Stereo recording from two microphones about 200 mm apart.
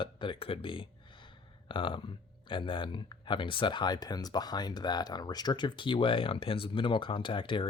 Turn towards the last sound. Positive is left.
turn(degrees=25)  # may be behind; listen again after turning